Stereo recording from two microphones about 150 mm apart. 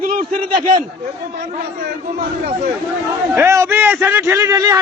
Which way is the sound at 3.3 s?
15° right (ahead or behind).